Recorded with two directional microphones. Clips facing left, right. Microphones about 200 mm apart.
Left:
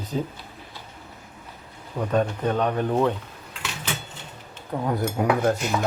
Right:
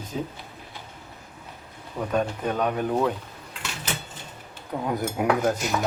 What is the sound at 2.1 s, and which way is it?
Speech, 5° right (ahead or behind).